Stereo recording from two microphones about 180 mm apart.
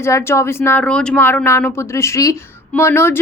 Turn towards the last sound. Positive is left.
turn(degrees=15)  # may be behind; listen again after turning